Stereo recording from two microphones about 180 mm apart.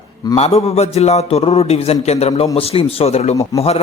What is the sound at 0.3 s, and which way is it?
A man's voice, 35° left (ahead or behind).